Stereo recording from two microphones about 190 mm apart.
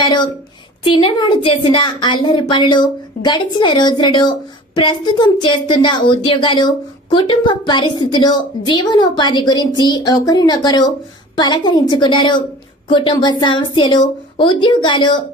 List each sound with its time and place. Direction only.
0.0 s a woman's voice: 25° left (ahead or behind)